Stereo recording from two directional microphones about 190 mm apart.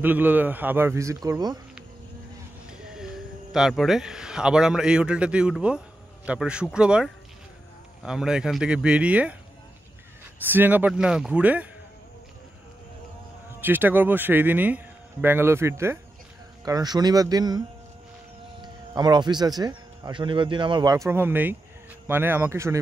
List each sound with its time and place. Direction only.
0.0 s a man's voice: 10° right (ahead or behind)
2.7 s a sound: 5° right (ahead or behind)
3.5 s a man's voice: centre (ahead or behind)
10.4 s a man's voice: 10° right (ahead or behind)
13.6 s a man's voice: 10° right (ahead or behind)